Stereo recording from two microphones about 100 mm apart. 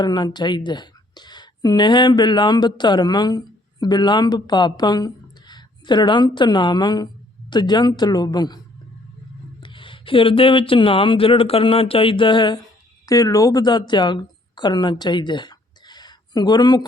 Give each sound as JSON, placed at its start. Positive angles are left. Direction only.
{"t": 0.0, "sound": "a woman's voice", "side_deg": 45}
{"t": 9.6, "sound": "speech", "side_deg": 55}
{"t": 13.1, "sound": "speech", "side_deg": 35}